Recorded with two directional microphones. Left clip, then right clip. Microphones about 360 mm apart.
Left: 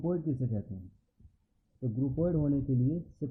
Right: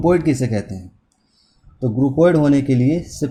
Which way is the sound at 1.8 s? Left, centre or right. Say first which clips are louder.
Right 18 dB; centre.